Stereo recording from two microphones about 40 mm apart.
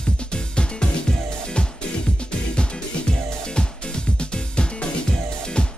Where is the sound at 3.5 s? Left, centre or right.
Left.